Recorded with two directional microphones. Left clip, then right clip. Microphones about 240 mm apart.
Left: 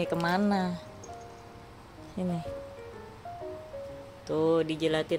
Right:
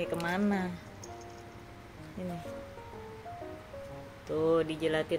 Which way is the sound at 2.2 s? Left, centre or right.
Left.